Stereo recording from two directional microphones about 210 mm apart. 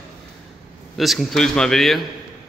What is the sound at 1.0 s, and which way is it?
A man's voice, centre (ahead or behind).